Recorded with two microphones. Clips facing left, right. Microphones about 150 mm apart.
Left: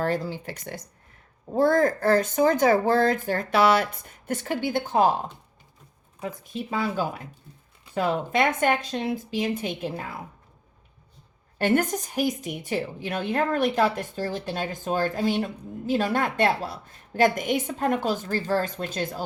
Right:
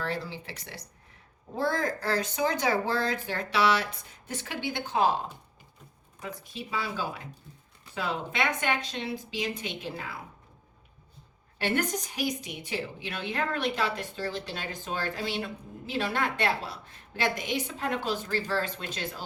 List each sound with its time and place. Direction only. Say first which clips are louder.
0.0 s a woman's voice: left 7 dB; 45° left (ahead or behind)
6.2 s a woman's voice: left 6 dB; 50° left (ahead or behind)
11.5 s a woman's voice: left 6 dB; 45° left (ahead or behind)